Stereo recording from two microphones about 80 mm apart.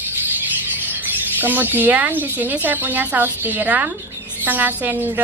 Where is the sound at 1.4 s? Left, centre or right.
Right.